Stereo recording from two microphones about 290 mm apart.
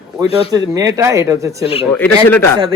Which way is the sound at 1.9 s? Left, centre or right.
Centre.